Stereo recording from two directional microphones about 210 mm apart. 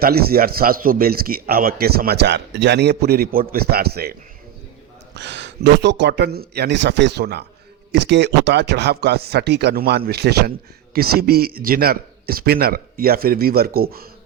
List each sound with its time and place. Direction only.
0.0 s speech: 45° right (ahead or behind)
5.1 s speech: 55° right (ahead or behind)